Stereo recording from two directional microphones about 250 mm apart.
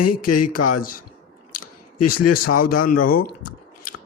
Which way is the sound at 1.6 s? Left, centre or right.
Left.